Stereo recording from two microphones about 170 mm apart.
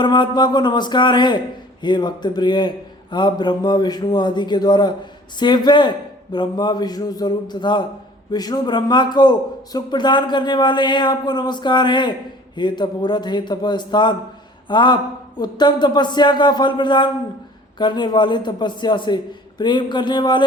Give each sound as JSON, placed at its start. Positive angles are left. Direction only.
{"t": 0.0, "sound": "a man's voice", "side_deg": 25}